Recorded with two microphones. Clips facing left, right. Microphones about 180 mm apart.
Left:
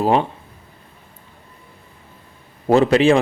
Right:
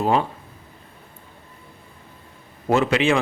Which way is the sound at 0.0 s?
30° left (ahead or behind).